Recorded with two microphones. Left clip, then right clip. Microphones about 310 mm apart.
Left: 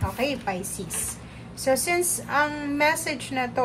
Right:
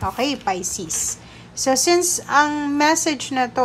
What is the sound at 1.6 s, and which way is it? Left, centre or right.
A woman's voice, centre.